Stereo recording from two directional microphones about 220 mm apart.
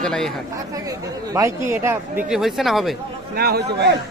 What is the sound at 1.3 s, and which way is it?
Speech, 15° right (ahead or behind).